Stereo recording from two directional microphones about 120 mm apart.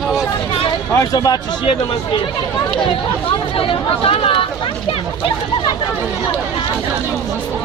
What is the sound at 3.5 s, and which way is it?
Speech, 50° left (ahead or behind).